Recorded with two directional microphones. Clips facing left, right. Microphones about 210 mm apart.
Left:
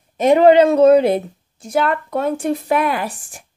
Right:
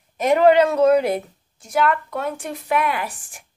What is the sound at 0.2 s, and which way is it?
A woman's voice, 25° left (ahead or behind).